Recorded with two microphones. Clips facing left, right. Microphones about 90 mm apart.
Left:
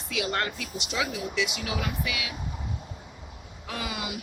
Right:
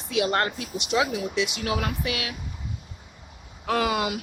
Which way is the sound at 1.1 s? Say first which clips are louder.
Right 3 dB; 20° right (ahead or behind).